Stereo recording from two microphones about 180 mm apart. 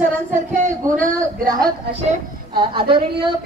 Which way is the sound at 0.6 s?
45° right (ahead or behind).